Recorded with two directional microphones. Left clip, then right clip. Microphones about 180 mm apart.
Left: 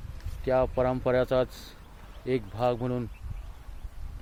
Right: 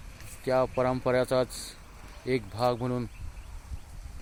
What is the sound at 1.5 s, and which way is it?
Speech, 30° left (ahead or behind).